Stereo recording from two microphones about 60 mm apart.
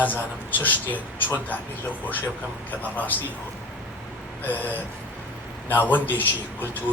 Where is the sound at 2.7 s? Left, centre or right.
Left.